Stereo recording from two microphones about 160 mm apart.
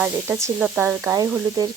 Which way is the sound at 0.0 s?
15° right (ahead or behind).